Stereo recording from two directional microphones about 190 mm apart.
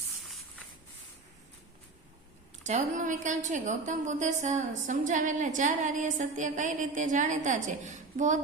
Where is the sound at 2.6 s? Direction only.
40° right (ahead or behind).